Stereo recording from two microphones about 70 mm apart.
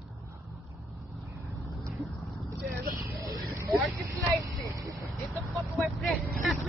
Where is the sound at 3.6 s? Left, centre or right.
Right.